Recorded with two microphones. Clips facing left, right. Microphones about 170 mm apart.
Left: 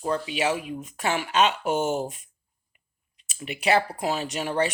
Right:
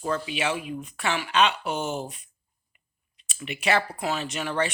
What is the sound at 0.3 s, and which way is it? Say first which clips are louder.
Speech: left 2 dB; 40° left (ahead or behind).